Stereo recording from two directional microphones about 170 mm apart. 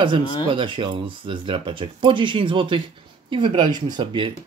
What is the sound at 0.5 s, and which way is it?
Speech, 30° right (ahead or behind).